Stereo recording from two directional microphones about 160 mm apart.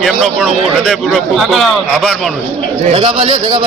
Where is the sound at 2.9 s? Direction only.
35° right (ahead or behind).